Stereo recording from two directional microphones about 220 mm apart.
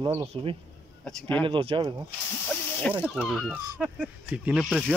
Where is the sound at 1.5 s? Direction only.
25° right (ahead or behind).